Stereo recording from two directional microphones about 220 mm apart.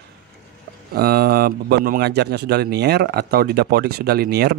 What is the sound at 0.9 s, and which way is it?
Speech, 45° right (ahead or behind).